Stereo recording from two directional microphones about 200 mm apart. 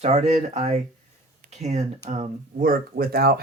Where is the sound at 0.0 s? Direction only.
30° right (ahead or behind).